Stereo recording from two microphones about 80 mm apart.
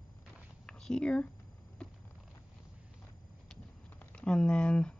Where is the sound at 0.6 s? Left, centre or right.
Centre.